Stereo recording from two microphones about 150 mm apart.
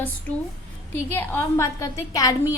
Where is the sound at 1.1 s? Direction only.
15° left (ahead or behind).